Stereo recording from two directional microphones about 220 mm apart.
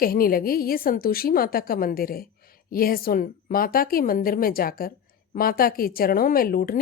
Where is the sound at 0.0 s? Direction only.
40° left (ahead or behind).